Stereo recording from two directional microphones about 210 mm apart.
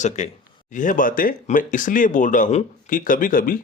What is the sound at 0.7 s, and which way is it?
Speech, 40° left (ahead or behind).